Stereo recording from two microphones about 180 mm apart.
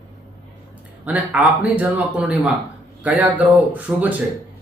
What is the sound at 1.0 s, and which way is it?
A man's voice, 5° right (ahead or behind).